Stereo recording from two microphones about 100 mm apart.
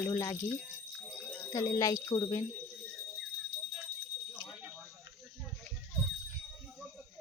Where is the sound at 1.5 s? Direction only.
40° left (ahead or behind).